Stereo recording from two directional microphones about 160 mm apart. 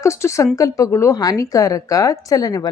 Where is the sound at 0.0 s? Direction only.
20° left (ahead or behind).